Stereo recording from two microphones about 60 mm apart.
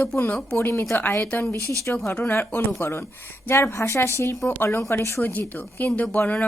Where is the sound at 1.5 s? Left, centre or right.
Right.